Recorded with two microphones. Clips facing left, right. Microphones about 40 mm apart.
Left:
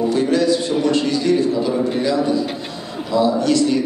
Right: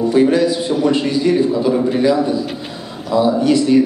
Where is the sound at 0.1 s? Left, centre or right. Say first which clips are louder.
Right 6 dB; centre.